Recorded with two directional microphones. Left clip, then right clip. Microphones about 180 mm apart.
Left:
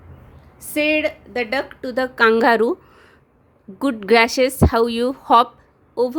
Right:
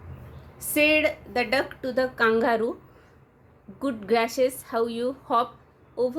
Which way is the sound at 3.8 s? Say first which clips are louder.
Left 9 dB; 50° left (ahead or behind).